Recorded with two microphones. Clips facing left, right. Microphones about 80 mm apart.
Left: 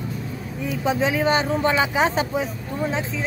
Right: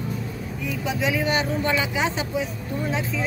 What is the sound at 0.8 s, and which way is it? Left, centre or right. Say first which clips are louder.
Speech: left 4 dB; left.